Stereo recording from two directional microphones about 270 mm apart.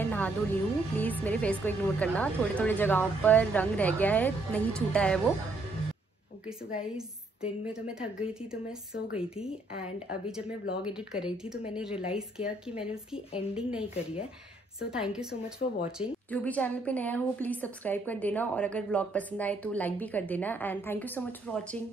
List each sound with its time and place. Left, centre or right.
0.0 s a woman's voice: centre
6.7 s a woman's voice: centre
15.6 s speech: left
16.0 s a woman's voice: centre